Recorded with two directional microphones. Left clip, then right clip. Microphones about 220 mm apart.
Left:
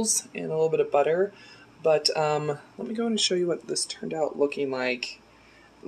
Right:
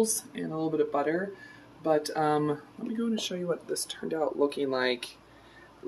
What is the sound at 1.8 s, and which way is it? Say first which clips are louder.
Speech: left 4 dB; 35° left (ahead or behind).